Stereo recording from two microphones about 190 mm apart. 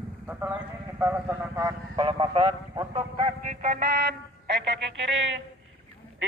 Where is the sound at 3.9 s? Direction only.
60° right (ahead or behind).